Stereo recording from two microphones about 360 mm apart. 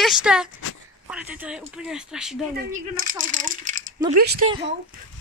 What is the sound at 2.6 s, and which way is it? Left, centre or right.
Speech, right.